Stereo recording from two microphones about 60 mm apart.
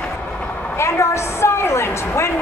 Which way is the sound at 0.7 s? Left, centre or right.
Left.